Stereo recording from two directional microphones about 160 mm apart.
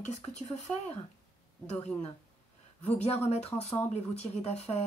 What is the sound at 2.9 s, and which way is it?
Speech, 40° left (ahead or behind).